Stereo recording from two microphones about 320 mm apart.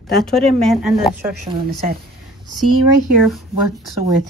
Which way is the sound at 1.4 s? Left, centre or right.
Right.